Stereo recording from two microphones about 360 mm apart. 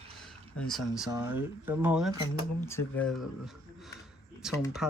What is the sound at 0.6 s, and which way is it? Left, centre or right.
Speech, centre.